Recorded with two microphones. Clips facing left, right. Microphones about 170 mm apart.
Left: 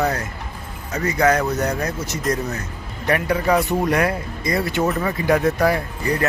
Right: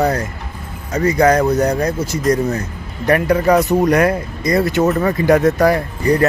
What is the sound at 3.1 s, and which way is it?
Speech, 45° right (ahead or behind).